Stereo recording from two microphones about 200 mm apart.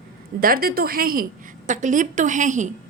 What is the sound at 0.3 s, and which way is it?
A woman's voice, 45° right (ahead or behind).